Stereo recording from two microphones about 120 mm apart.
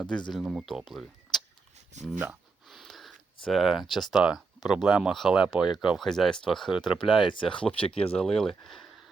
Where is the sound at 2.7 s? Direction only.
Centre (ahead or behind).